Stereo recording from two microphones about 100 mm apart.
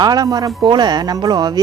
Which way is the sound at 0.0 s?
40° right (ahead or behind).